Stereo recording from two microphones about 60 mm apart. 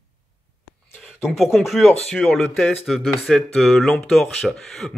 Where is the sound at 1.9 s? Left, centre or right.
Centre.